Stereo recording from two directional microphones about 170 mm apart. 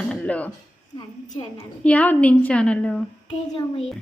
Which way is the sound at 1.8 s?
10° left (ahead or behind).